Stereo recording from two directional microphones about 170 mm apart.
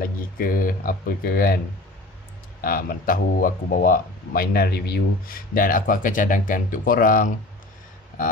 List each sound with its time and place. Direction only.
0.0 s speech: 55° left (ahead or behind)
2.6 s speech: 60° left (ahead or behind)